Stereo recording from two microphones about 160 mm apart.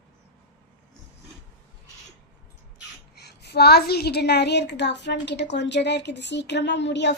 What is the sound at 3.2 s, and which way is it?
A woman's voice, 90° left.